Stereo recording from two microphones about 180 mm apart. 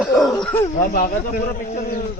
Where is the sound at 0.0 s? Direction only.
Centre (ahead or behind).